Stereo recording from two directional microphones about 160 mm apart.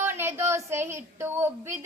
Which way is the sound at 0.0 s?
15° right (ahead or behind).